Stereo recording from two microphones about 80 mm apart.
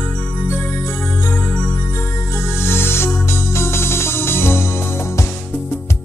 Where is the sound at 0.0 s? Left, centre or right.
Left.